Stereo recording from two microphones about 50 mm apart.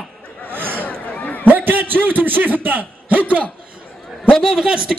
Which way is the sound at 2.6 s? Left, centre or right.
Right.